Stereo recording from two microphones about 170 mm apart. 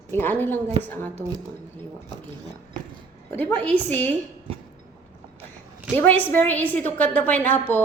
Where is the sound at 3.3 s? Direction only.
10° left (ahead or behind).